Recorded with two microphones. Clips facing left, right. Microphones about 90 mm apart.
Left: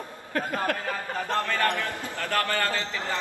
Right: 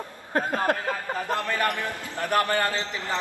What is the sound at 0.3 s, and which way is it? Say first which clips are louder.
Speech: right 3 dB; 30° right (ahead or behind).